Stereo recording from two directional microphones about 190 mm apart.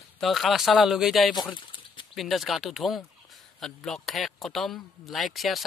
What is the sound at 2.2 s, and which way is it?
Speech, centre (ahead or behind).